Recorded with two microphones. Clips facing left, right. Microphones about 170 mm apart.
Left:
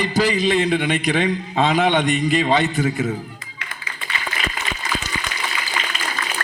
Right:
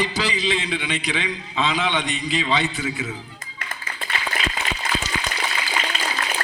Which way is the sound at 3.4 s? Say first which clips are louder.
Right 1 dB; 45° right (ahead or behind).